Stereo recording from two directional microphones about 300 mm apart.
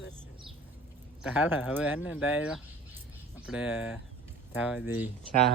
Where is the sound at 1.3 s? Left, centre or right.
Centre.